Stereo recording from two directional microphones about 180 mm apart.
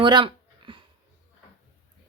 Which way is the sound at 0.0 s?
25° right (ahead or behind).